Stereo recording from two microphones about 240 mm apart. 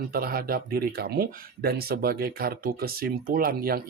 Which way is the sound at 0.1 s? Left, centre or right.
Right.